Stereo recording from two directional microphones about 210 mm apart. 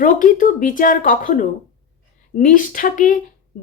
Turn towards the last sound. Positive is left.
turn(degrees=40)  # may be behind; listen again after turning